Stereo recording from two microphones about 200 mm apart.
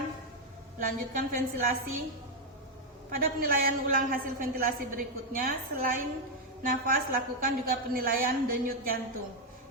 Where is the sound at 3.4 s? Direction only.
45° right (ahead or behind).